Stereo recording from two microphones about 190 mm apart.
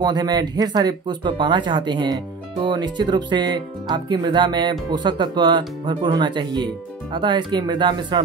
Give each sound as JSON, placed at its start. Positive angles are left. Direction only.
{"t": 0.0, "sound": "speech", "side_deg": -20}